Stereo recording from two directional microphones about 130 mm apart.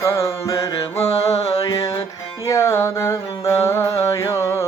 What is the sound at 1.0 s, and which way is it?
Music, 55° left (ahead or behind).